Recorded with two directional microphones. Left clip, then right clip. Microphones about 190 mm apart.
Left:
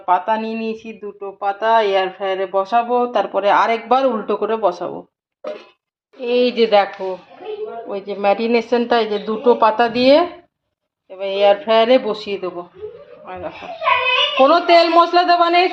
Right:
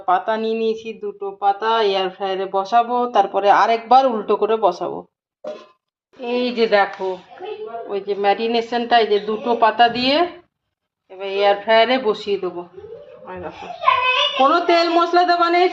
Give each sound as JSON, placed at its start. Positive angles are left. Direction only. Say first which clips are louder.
{"t": 0.0, "sound": "speech", "louder": "left 1 dB", "side_deg": 0}
{"t": 6.1, "sound": "speech", "louder": "left 4 dB", "side_deg": 5}
{"t": 7.9, "sound": "speech", "louder": "left 1 dB", "side_deg": 20}
{"t": 14.4, "sound": "speech", "louder": "left 4 dB", "side_deg": 10}